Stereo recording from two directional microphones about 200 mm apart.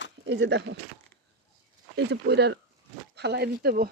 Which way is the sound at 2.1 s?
55° right (ahead or behind).